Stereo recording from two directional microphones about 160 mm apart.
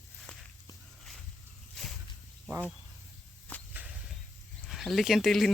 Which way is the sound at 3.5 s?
10° left (ahead or behind).